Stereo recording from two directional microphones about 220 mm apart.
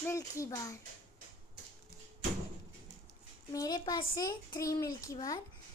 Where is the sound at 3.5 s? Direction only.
15° left (ahead or behind).